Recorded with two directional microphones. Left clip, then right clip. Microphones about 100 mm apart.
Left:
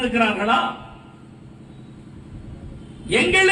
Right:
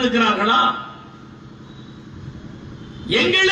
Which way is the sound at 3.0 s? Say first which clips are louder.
Right 1 dB; 40° left (ahead or behind).